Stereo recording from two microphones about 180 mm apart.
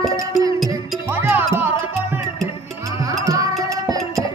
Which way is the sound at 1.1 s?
10° right (ahead or behind).